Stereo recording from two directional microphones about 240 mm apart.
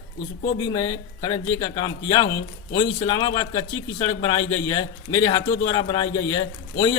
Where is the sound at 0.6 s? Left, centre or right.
Centre.